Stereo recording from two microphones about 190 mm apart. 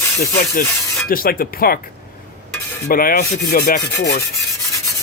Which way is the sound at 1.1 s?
50° left (ahead or behind).